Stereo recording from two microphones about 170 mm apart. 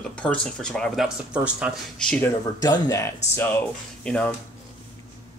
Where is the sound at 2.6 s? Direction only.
20° left (ahead or behind).